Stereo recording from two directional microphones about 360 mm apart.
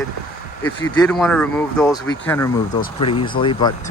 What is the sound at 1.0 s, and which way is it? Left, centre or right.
Speech, centre.